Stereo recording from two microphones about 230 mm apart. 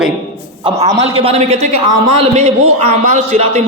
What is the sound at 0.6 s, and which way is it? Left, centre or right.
A man's voice, centre.